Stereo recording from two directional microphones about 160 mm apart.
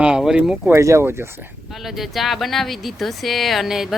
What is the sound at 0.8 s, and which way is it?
Speech, 15° right (ahead or behind).